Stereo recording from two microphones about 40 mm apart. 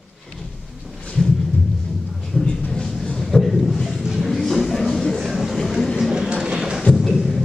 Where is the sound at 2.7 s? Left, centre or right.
Centre.